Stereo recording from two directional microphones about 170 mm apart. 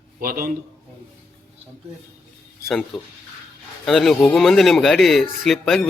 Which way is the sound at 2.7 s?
Centre (ahead or behind).